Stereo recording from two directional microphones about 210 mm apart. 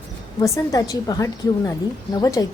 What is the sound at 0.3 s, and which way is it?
A woman's voice, 15° left (ahead or behind).